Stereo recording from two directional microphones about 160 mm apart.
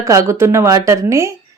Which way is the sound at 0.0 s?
20° right (ahead or behind).